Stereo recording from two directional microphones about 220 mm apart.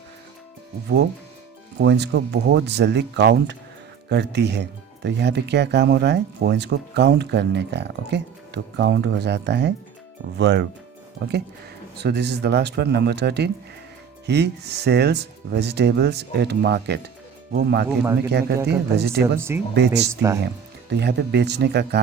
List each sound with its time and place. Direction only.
1.8 s speech: 50° right (ahead or behind)
17.8 s speech: 10° right (ahead or behind)
18.3 s speech: 50° right (ahead or behind)
19.4 s speech: 10° right (ahead or behind)
19.7 s speech: 50° right (ahead or behind)